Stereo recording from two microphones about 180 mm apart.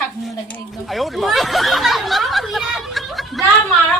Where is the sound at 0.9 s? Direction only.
Centre (ahead or behind).